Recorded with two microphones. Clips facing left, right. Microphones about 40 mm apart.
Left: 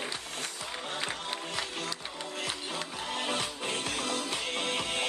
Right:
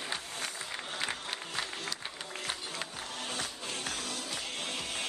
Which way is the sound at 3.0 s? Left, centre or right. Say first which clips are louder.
Left 9 dB; left.